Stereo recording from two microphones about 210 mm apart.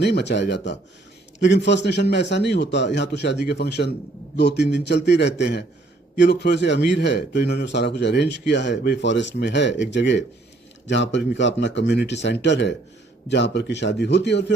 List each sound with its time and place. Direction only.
0.0 s a man's voice: 55° left (ahead or behind)